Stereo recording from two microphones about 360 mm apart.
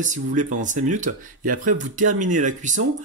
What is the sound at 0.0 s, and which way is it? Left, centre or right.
Speech, right.